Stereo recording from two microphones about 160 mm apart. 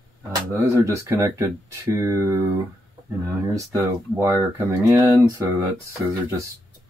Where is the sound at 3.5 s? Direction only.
20° right (ahead or behind).